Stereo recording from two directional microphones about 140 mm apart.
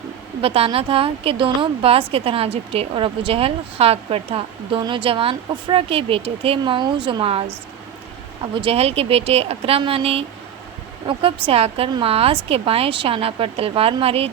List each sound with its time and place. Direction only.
0.4 s a woman's voice: 40° right (ahead or behind)
8.6 s a woman's voice: 45° right (ahead or behind)